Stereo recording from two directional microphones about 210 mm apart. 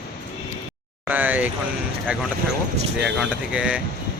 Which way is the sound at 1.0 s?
10° right (ahead or behind).